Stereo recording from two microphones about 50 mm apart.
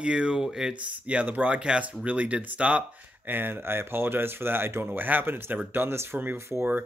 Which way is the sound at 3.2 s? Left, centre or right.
Right.